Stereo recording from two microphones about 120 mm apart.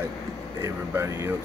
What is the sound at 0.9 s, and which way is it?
Speech, 25° right (ahead or behind).